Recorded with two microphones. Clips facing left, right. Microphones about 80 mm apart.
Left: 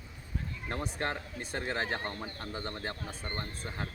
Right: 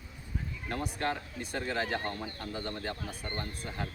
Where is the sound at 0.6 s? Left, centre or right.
Left.